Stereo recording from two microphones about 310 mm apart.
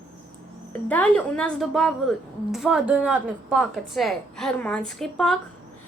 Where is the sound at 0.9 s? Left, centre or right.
Centre.